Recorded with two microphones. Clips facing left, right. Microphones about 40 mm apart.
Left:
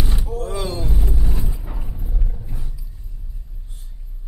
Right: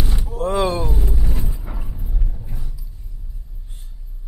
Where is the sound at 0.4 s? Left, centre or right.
Right.